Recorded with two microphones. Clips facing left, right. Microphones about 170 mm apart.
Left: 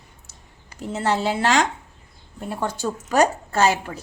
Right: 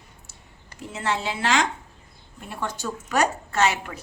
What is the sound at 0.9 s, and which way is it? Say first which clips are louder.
A woman's voice: left 5 dB; 35° left (ahead or behind).